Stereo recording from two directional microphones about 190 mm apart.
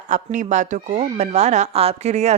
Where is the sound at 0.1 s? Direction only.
40° right (ahead or behind).